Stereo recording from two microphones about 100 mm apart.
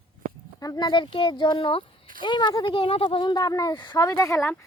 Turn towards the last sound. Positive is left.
turn(degrees=30)  # may be behind; listen again after turning